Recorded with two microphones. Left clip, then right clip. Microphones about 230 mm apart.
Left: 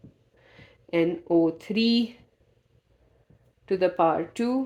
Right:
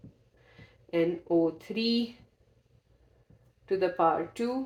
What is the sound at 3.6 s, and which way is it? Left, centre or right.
Speech, left.